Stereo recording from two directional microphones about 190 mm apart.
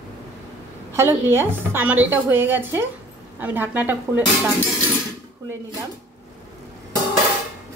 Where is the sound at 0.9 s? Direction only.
10° right (ahead or behind).